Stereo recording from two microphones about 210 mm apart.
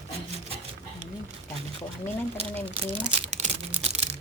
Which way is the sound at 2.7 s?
30° right (ahead or behind).